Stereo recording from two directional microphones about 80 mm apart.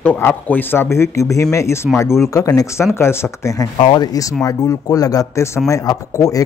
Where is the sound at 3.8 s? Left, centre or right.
Left.